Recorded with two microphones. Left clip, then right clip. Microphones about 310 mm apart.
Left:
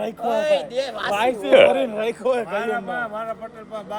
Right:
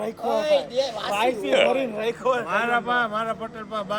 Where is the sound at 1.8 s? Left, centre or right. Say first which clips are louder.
Left 3 dB; left.